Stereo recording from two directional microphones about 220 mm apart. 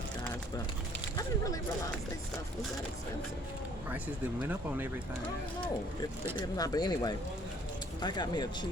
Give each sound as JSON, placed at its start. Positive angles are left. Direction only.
{"t": 3.8, "sound": "speech", "side_deg": -5}
{"t": 6.4, "sound": "speech", "side_deg": 15}